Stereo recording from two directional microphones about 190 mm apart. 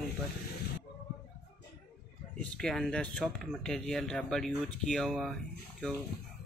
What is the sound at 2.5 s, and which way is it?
Speech, 5° left (ahead or behind).